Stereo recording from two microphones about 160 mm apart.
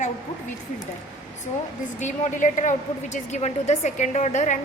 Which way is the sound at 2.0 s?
50° left (ahead or behind).